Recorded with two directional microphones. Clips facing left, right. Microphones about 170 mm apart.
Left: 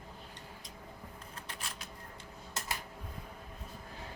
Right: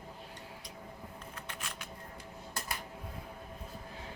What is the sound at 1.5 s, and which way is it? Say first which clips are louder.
Shuffling cards: even; 35° left (ahead or behind).